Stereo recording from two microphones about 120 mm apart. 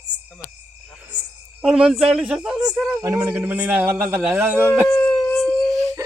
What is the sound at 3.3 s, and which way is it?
A man's voice, 15° right (ahead or behind).